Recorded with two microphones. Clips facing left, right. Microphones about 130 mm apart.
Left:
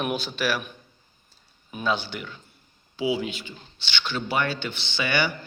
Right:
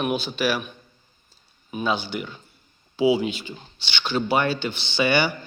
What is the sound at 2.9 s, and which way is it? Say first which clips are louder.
Speech: right 6 dB; 30° right (ahead or behind).